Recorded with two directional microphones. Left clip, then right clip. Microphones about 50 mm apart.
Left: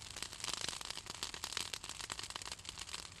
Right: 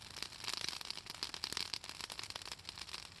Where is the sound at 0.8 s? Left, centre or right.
Centre.